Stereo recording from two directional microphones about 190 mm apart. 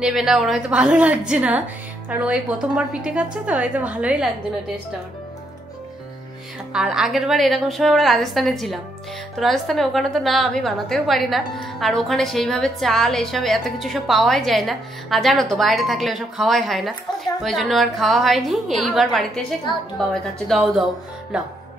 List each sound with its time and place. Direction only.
0.0 s a woman's voice: 5° right (ahead or behind)
6.7 s a woman's voice: 5° right (ahead or behind)